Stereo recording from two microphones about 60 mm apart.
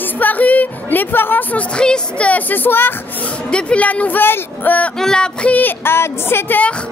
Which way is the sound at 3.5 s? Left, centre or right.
Centre.